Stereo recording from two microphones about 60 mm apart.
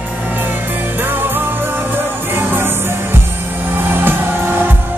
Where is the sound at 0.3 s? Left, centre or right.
Right.